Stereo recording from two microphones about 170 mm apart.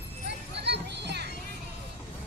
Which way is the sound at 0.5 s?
85° right.